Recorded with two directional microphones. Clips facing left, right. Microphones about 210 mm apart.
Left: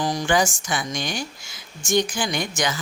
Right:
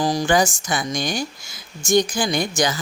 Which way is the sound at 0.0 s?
35° right (ahead or behind).